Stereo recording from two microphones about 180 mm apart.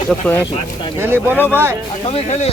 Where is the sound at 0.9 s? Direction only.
10° right (ahead or behind).